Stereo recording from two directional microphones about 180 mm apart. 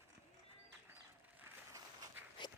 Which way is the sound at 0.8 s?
15° right (ahead or behind).